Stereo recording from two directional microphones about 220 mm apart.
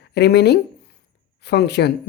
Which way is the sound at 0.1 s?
50° left (ahead or behind).